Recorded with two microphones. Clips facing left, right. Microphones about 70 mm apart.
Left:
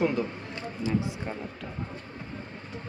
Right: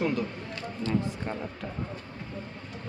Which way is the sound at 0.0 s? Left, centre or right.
Left.